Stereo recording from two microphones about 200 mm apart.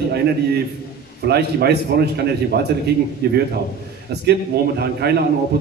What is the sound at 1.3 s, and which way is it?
A man's voice, 55° right (ahead or behind).